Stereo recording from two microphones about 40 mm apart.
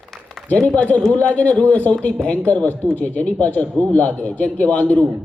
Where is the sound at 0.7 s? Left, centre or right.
Left.